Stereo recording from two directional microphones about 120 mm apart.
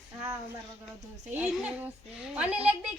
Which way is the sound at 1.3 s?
10° right (ahead or behind).